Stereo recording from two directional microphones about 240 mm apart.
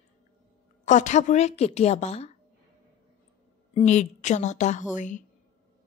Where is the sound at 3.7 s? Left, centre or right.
Left.